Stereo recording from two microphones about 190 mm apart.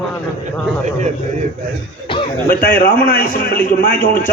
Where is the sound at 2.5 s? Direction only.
50° left (ahead or behind).